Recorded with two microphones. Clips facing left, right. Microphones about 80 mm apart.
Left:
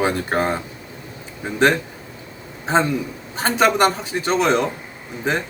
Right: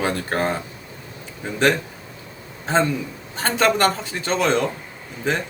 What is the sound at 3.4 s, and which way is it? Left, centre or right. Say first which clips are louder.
Speech: left 2 dB; centre.